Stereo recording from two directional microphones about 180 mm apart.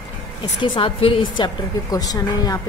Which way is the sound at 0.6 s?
30° left (ahead or behind).